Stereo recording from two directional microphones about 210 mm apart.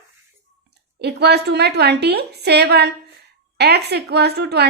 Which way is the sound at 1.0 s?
50° right (ahead or behind).